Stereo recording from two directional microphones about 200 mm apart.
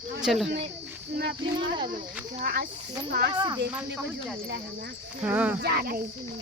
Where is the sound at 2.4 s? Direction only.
50° right (ahead or behind).